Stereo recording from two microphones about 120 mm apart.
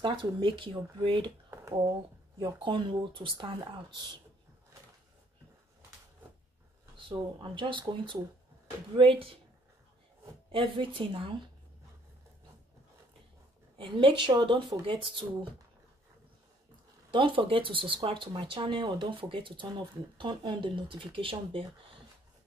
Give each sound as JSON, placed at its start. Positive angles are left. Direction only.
{"t": 0.0, "sound": "speech", "side_deg": -45}
{"t": 1.5, "sound": "a sound", "side_deg": -20}
{"t": 2.4, "sound": "speech", "side_deg": -40}
{"t": 7.1, "sound": "speech", "side_deg": -45}
{"t": 10.5, "sound": "speech", "side_deg": -45}
{"t": 13.7, "sound": "speech", "side_deg": -45}
{"t": 17.1, "sound": "speech", "side_deg": -45}